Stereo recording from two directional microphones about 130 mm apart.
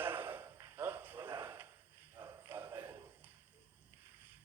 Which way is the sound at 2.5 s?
15° right (ahead or behind).